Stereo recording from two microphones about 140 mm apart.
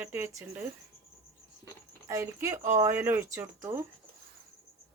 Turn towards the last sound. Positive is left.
turn(degrees=-20)  # may be behind; listen again after turning